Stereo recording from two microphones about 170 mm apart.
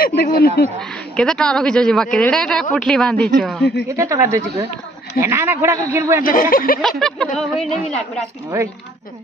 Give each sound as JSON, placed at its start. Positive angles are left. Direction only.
{"t": 0.0, "sound": "speech", "side_deg": 60}
{"t": 0.7, "sound": "a man's voice", "side_deg": 5}
{"t": 3.9, "sound": "a man's voice", "side_deg": -20}
{"t": 6.2, "sound": "speech", "side_deg": 55}
{"t": 6.8, "sound": "a man's voice", "side_deg": 0}